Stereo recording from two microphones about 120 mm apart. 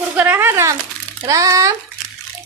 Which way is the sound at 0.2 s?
20° right (ahead or behind).